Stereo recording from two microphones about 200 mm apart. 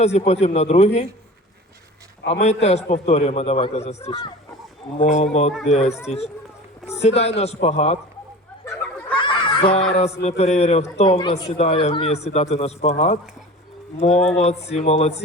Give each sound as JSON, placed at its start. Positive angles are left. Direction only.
{"t": 0.0, "sound": "speech", "side_deg": 35}
{"t": 2.2, "sound": "speech", "side_deg": 30}
{"t": 8.6, "sound": "a sound", "side_deg": 10}
{"t": 9.1, "sound": "a sound", "side_deg": 25}
{"t": 9.9, "sound": "speech", "side_deg": 30}
{"t": 14.3, "sound": "speech", "side_deg": 30}